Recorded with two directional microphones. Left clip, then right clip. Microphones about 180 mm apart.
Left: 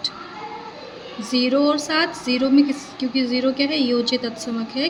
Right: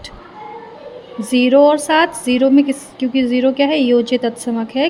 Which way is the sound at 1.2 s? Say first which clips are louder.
Right 8 dB; 40° right (ahead or behind).